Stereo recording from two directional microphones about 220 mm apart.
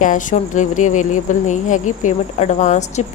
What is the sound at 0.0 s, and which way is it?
A woman's voice, 35° left (ahead or behind).